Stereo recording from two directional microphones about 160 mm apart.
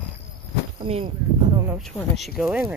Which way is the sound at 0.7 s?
35° right (ahead or behind).